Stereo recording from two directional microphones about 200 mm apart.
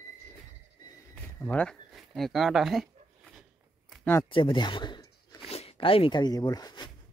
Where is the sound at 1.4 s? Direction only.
5° left (ahead or behind).